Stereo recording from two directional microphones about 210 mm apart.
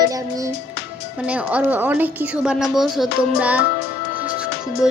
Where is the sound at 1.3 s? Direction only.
5° right (ahead or behind).